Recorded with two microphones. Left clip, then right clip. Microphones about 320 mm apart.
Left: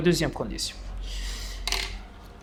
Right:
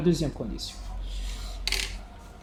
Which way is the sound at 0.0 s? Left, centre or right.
Left.